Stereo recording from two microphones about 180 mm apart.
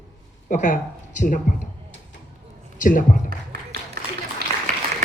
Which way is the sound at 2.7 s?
50° left (ahead or behind).